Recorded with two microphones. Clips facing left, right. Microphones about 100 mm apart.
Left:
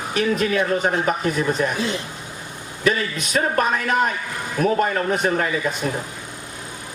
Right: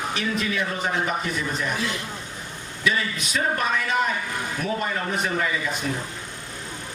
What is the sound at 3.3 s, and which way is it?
A man's voice, 45° left (ahead or behind).